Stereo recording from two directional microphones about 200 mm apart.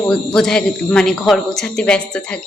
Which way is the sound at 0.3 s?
5° left (ahead or behind).